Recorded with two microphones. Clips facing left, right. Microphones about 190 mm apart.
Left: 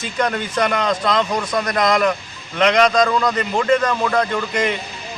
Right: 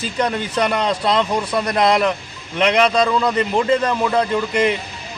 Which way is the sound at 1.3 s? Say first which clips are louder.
Right 1 dB; 10° right (ahead or behind).